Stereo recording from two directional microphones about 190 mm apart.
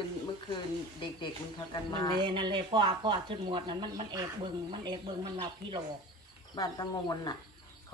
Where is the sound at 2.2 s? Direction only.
25° right (ahead or behind).